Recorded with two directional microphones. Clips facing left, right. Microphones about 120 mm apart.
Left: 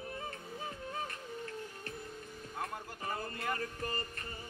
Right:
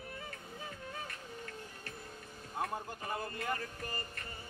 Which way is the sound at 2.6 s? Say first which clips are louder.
Right 3 dB; 25° right (ahead or behind).